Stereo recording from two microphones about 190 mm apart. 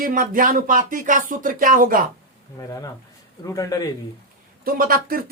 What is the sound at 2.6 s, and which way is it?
Speech, 20° left (ahead or behind).